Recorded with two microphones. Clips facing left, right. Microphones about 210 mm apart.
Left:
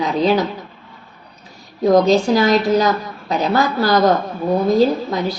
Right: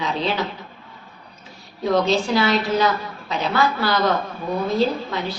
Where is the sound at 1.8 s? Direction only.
40° left (ahead or behind).